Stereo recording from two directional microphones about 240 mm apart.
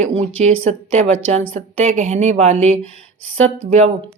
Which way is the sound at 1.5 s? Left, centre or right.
Right.